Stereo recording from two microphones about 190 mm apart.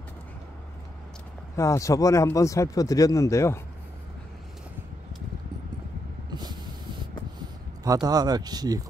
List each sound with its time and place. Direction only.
1.6 s speech: 15° left (ahead or behind)
6.3 s vehicle: 20° right (ahead or behind)
7.8 s speech: 20° right (ahead or behind)